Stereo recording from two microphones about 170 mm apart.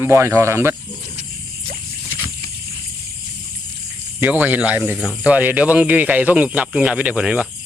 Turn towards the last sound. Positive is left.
turn(degrees=-5)  # may be behind; listen again after turning